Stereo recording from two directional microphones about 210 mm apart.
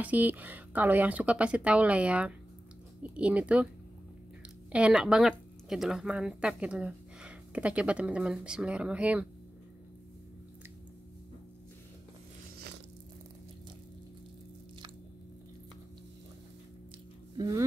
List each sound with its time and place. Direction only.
0.0 s a woman's voice: 10° right (ahead or behind)
4.7 s a woman's voice: 5° right (ahead or behind)
17.4 s speech: 15° right (ahead or behind)